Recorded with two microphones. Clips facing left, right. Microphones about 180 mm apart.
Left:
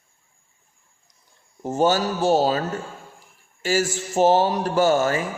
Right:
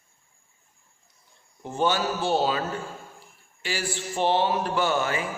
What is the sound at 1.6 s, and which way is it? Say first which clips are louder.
Speech: left 5 dB; 40° left (ahead or behind).